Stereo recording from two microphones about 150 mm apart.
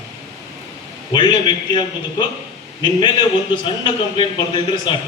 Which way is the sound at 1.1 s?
30° left (ahead or behind).